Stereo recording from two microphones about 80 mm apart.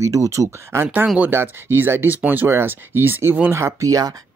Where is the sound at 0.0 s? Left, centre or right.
Right.